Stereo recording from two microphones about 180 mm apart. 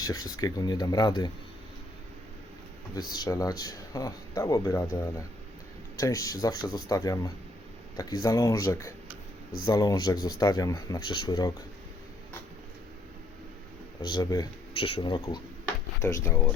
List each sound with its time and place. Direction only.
0.0 s speech: 20° left (ahead or behind)
3.1 s speech: 20° left (ahead or behind)
14.0 s speech: 20° left (ahead or behind)
16.0 s speech: 15° left (ahead or behind)